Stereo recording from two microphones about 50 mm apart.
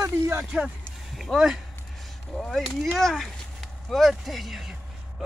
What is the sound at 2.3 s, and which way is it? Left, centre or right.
Speech, left.